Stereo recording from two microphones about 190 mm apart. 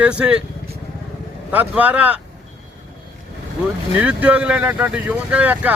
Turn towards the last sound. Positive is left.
turn(degrees=-10)  # may be behind; listen again after turning